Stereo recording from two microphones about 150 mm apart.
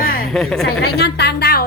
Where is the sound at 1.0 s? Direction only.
90° left.